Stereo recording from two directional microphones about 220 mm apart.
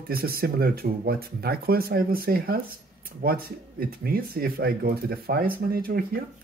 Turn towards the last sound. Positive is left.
turn(degrees=-45)  # may be behind; listen again after turning